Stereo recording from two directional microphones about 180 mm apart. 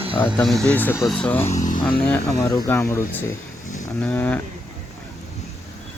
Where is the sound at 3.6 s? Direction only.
45° left (ahead or behind).